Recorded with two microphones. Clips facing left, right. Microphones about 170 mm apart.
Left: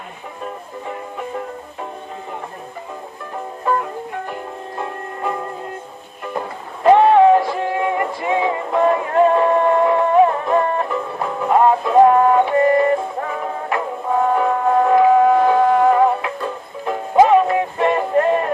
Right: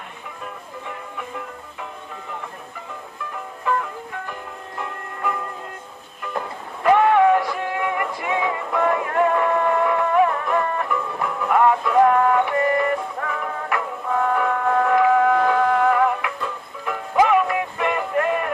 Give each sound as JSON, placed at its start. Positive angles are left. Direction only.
{"t": 3.3, "sound": "music", "side_deg": 35}
{"t": 6.8, "sound": "music", "side_deg": 25}